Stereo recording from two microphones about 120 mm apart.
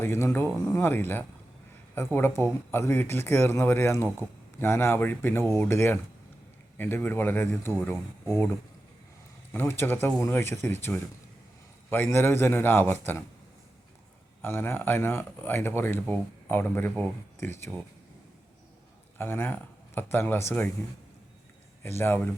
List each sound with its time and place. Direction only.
0.0 s speech: 20° left (ahead or behind)
9.5 s speech: 20° left (ahead or behind)
14.4 s speech: 20° left (ahead or behind)
19.2 s speech: 15° left (ahead or behind)
21.8 s speech: 20° left (ahead or behind)